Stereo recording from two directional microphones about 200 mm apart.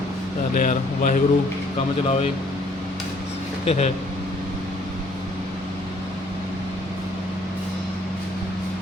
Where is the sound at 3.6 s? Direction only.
30° left (ahead or behind).